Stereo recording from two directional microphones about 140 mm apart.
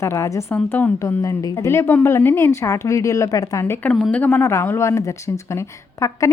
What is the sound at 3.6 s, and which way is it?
A woman's voice, 10° left (ahead or behind).